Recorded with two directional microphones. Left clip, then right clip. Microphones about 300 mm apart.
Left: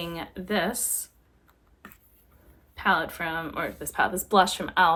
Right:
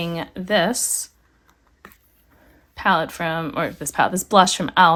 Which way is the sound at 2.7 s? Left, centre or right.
Right.